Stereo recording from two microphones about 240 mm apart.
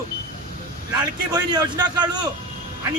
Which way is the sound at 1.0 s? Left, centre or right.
Centre.